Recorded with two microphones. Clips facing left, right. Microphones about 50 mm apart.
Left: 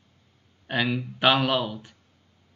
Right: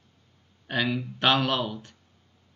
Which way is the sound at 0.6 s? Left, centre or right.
Centre.